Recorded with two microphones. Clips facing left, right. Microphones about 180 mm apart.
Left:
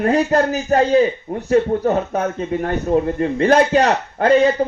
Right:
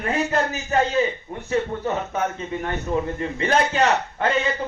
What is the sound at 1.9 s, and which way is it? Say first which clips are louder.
A man's voice: left 6 dB; 55° left (ahead or behind).